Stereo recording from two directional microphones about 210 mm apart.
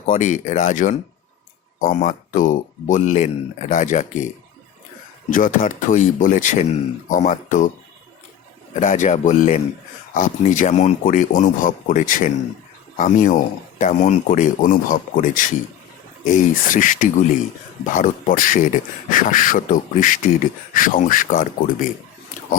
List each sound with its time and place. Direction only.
0.0 s speech: 35° left (ahead or behind)
5.3 s speech: 40° left (ahead or behind)
8.7 s speech: 35° left (ahead or behind)